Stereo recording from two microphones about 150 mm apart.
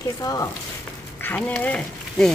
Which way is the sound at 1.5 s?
10° left (ahead or behind).